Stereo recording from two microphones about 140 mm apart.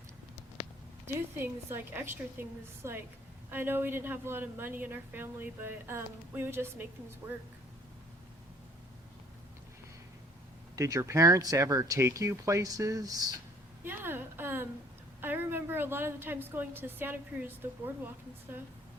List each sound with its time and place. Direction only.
1.0 s a woman's voice: 15° right (ahead or behind)
10.8 s speech: 25° right (ahead or behind)
13.8 s a woman's voice: 15° right (ahead or behind)